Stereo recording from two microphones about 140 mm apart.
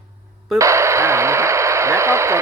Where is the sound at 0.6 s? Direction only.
20° right (ahead or behind).